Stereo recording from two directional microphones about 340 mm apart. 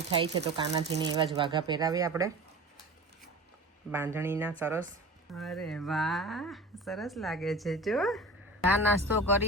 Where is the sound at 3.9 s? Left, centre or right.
Centre.